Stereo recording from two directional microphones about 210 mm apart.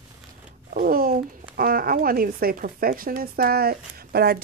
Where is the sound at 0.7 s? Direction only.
45° right (ahead or behind).